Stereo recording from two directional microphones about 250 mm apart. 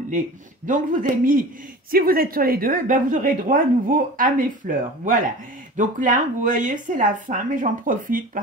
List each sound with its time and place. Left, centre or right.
0.7 s a woman's voice: right